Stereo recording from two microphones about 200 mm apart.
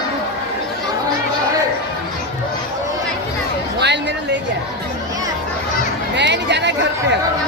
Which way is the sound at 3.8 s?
60° right (ahead or behind).